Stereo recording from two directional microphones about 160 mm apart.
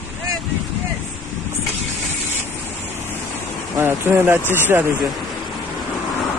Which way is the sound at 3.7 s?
15° right (ahead or behind).